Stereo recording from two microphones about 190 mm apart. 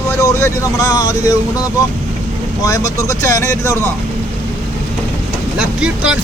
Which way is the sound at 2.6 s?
20° left (ahead or behind).